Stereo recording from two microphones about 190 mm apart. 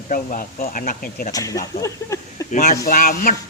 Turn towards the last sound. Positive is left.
turn(degrees=50)  # may be behind; listen again after turning